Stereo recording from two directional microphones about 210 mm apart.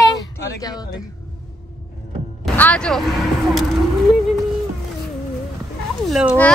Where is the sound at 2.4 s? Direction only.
5° left (ahead or behind).